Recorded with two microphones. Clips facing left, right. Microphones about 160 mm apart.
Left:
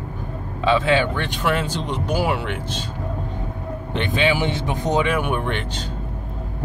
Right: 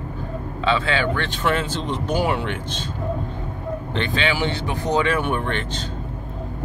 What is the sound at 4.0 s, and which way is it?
Speech, 15° left (ahead or behind).